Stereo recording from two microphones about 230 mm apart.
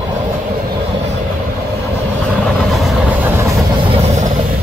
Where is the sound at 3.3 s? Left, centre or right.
Centre.